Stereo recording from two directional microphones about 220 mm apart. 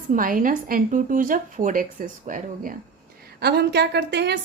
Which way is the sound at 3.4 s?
45° right (ahead or behind).